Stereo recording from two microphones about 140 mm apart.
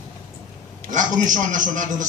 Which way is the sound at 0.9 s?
65° right (ahead or behind).